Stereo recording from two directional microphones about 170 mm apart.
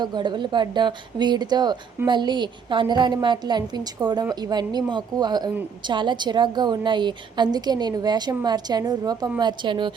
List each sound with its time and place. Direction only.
0.0 s a woman's voice: 25° right (ahead or behind)